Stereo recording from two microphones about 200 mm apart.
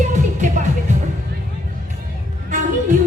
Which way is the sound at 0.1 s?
40° right (ahead or behind).